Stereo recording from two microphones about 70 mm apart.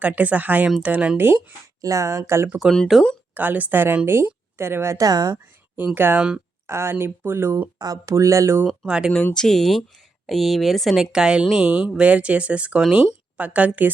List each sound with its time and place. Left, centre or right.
0.0 s speech: right
1.8 s speech: right
2.9 s speech: centre
3.3 s speech: right
4.9 s speech: right
5.7 s speech: right
7.8 s speech: right
8.1 s speech: right
8.9 s speech: centre
9.3 s speech: centre; by 13.9 s right